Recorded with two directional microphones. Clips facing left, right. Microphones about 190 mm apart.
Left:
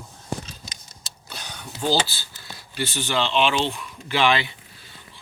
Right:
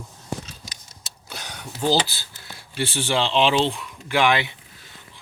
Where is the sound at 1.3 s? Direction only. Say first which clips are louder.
Right 1 dB; 15° right (ahead or behind).